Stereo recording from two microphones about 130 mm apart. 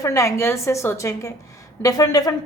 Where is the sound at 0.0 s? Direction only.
25° left (ahead or behind).